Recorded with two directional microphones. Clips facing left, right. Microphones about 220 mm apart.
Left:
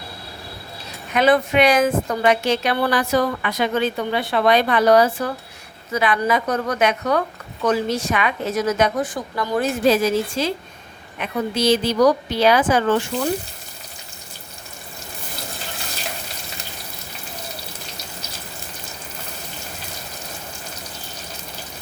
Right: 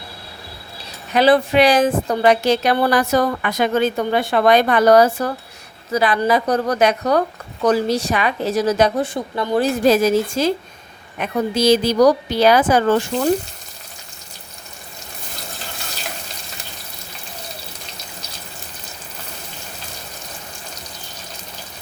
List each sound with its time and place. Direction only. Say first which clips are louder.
1.1 s a woman's voice: right 3 dB; 30° right (ahead or behind)
9.8 s a woman's voice: right 2 dB; 40° right (ahead or behind)